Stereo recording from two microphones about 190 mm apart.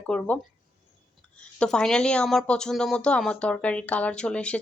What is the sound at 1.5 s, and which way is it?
A woman's voice, 5° left (ahead or behind).